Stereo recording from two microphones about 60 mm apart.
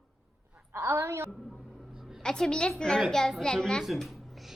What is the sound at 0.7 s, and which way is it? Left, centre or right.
Speech, right.